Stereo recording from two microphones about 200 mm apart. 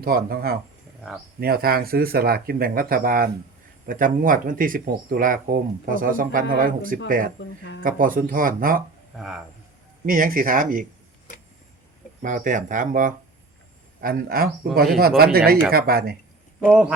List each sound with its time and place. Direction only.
0.0 s speech: 50° right (ahead or behind)
7.3 s speech: 65° left (ahead or behind)
7.8 s speech: 45° right (ahead or behind)
9.1 s speech: centre (ahead or behind)
10.1 s speech: 45° right (ahead or behind)
12.2 s speech: 40° right (ahead or behind)
16.6 s speech: 5° right (ahead or behind)